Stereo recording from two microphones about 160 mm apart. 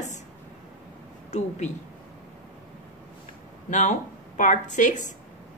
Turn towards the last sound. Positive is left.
turn(degrees=50)  # may be behind; listen again after turning